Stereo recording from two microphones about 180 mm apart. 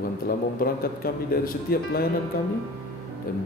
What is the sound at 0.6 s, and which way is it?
Speech, 55° left (ahead or behind).